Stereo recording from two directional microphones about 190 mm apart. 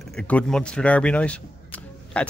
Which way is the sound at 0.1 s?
5° left (ahead or behind).